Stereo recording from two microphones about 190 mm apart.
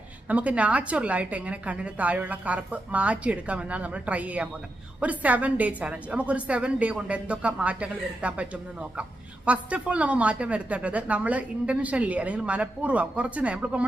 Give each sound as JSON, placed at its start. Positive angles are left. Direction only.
{"t": 0.3, "sound": "a woman's voice", "side_deg": -5}